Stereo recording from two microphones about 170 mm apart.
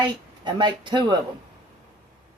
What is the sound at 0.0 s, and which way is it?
Speech, 25° right (ahead or behind).